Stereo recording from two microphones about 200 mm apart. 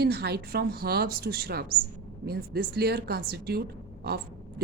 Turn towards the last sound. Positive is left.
turn(degrees=-55)  # may be behind; listen again after turning